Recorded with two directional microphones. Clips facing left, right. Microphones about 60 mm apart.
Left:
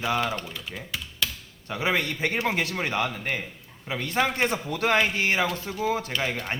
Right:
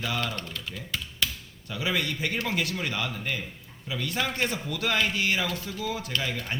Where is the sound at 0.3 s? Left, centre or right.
Centre.